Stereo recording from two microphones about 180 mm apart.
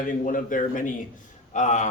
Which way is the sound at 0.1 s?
50° left (ahead or behind).